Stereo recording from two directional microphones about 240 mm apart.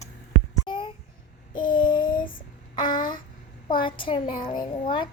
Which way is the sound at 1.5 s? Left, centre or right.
Left.